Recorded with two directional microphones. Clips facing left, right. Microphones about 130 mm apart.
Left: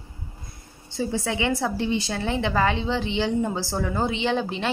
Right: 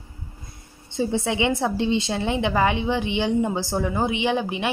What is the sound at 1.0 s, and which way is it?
A woman's voice, 20° right (ahead or behind).